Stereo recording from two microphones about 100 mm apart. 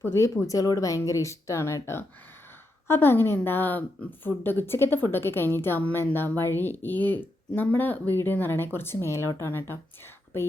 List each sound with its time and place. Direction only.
0.0 s speech: 25° left (ahead or behind)